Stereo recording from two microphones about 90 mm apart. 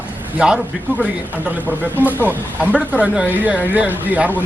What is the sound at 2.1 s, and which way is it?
Speech, 15° right (ahead or behind).